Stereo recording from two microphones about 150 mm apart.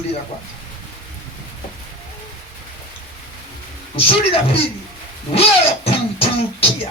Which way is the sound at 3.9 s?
40° left (ahead or behind).